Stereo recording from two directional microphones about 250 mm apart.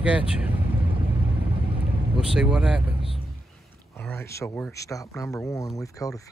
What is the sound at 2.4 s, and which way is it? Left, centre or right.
Speech, centre.